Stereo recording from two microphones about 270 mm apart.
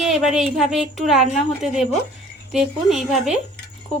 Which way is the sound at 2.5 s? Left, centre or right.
Centre.